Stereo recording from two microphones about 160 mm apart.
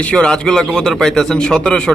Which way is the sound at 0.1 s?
5° left (ahead or behind).